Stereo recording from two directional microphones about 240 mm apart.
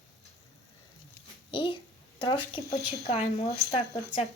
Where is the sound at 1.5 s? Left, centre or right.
Left.